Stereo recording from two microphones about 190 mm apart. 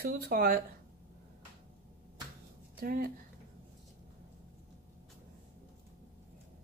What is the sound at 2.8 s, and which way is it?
Speech, 50° right (ahead or behind).